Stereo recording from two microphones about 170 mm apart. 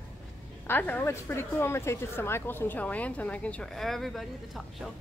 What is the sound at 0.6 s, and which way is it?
Speech, 10° left (ahead or behind).